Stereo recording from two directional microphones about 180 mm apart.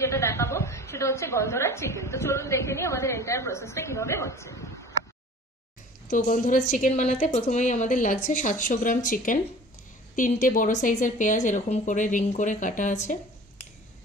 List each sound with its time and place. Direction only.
0.0 s a woman's voice: 15° left (ahead or behind)
6.0 s a woman's voice: 45° left (ahead or behind)